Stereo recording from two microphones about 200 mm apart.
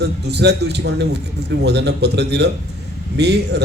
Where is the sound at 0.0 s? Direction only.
55° right (ahead or behind).